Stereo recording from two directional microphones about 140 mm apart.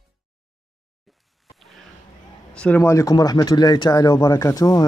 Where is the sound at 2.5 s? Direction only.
10° left (ahead or behind).